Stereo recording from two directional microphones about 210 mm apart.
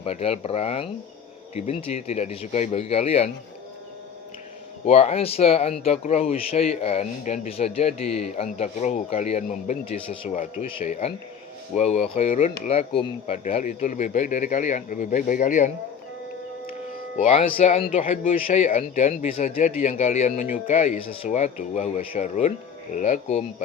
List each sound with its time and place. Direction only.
0.0 s speech: 30° left (ahead or behind)
4.9 s speech: 30° left (ahead or behind)
17.2 s speech: 30° left (ahead or behind)